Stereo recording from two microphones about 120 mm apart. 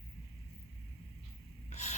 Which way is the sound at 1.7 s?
70° left (ahead or behind).